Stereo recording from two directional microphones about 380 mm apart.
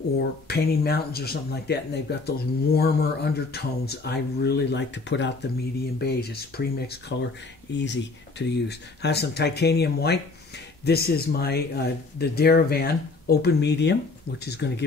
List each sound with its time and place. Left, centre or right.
0.5 s speech: left